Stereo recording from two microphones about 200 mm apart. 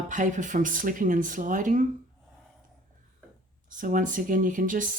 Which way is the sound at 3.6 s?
40° right (ahead or behind).